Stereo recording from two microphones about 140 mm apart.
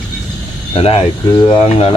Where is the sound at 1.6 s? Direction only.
45° left (ahead or behind).